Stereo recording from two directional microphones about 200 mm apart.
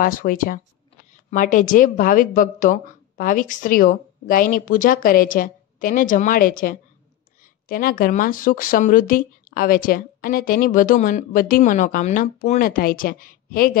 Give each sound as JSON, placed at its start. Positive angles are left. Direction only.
{"t": 0.0, "sound": "speech", "side_deg": 45}